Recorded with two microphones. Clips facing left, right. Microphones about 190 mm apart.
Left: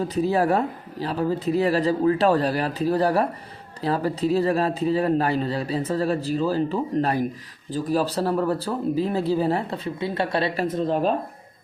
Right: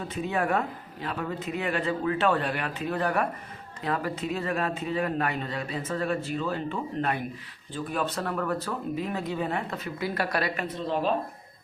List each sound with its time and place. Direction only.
0.0 s speech: 35° left (ahead or behind)